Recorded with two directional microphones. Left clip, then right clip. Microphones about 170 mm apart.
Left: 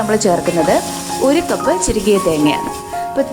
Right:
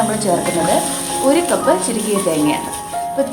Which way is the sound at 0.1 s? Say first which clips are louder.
Left 3 dB; 40° left (ahead or behind).